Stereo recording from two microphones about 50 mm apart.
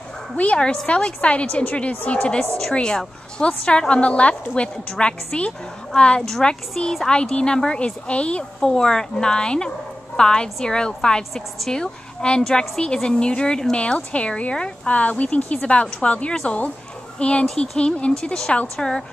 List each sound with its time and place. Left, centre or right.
0.4 s a woman's voice: left; by 7.1 s centre
7.1 s a woman's voice: centre